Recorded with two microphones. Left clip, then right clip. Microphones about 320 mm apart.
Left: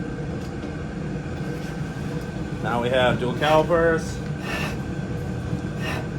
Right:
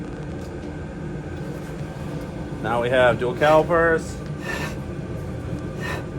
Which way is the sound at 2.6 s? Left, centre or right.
Right.